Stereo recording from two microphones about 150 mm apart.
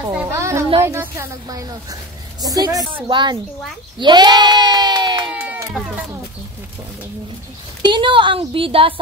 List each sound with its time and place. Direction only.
0.1 s a sound: 15° right (ahead or behind)
0.8 s a woman's voice: 20° right (ahead or behind)
4.0 s bleat: 30° right (ahead or behind)
5.3 s music: 10° right (ahead or behind)
7.8 s a woman's voice: 35° right (ahead or behind)